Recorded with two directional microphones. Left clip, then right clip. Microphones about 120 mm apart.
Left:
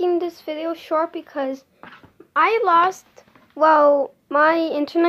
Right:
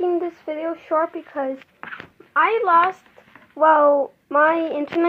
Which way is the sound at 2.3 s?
45° left (ahead or behind).